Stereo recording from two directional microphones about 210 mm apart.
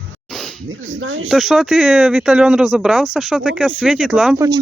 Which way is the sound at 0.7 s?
70° right (ahead or behind).